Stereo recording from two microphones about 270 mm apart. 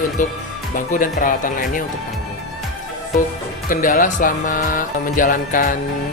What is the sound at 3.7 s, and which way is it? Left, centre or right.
Music, left.